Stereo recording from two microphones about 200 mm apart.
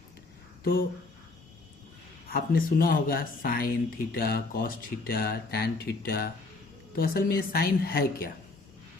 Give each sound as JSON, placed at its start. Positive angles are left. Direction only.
{"t": 0.6, "sound": "speech", "side_deg": 45}
{"t": 2.3, "sound": "speech", "side_deg": 45}